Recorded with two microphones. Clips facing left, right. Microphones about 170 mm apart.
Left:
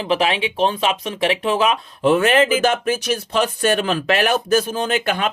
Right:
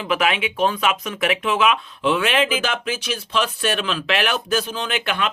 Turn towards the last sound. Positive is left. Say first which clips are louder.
# left 4 dB
turn(degrees=40)  # may be behind; listen again after turning